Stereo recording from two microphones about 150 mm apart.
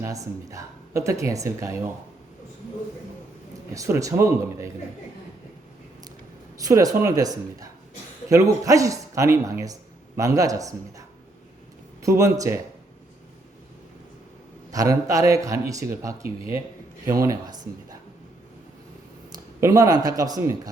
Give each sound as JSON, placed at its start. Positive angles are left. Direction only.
{"t": 0.0, "sound": "speech", "side_deg": -20}
{"t": 3.8, "sound": "speech", "side_deg": -20}
{"t": 6.6, "sound": "speech", "side_deg": -25}
{"t": 12.0, "sound": "speech", "side_deg": -20}
{"t": 14.7, "sound": "speech", "side_deg": -20}
{"t": 19.5, "sound": "speech", "side_deg": -20}